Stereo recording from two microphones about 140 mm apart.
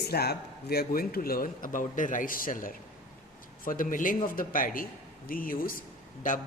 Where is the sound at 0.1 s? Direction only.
90° left.